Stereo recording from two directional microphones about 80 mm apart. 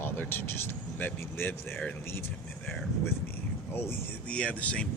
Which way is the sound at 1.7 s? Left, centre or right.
Centre.